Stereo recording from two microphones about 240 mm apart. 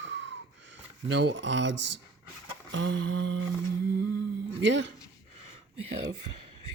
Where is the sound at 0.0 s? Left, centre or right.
Right.